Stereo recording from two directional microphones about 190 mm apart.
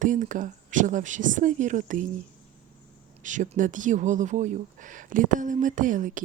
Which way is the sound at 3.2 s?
40° right (ahead or behind).